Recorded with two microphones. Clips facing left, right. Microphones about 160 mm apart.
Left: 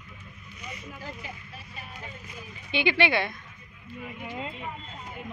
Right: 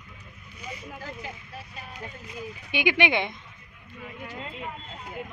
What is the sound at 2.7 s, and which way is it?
Speech, 15° right (ahead or behind).